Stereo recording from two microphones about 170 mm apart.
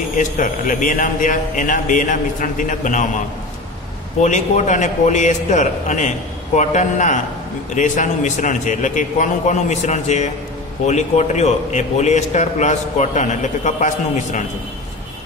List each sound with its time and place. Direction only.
0.2 s a man's voice: 50° left (ahead or behind)
4.2 s a man's voice: 45° left (ahead or behind)